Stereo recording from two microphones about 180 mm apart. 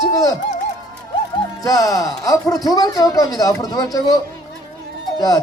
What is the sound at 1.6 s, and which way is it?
Speech, 20° left (ahead or behind).